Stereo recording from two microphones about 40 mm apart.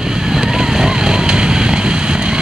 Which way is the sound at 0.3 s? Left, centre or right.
Centre.